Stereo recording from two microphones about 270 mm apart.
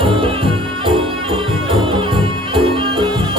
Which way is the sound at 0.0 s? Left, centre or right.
Centre.